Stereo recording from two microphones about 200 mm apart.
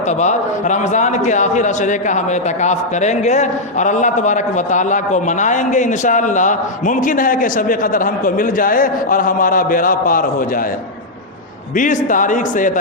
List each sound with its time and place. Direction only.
0.1 s a man's voice: 35° left (ahead or behind)
11.7 s a man's voice: 40° left (ahead or behind)